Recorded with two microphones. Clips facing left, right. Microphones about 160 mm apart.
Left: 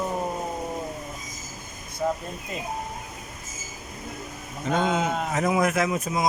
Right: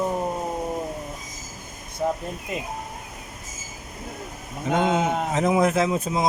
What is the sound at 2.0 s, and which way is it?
Speech, 20° right (ahead or behind).